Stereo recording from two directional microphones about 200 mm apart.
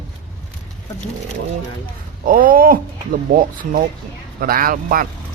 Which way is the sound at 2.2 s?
45° right (ahead or behind).